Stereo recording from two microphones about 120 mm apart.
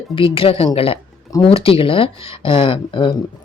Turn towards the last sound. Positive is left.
turn(degrees=45)  # may be behind; listen again after turning